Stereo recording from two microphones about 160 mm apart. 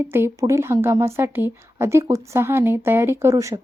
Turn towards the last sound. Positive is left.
turn(degrees=-20)  # may be behind; listen again after turning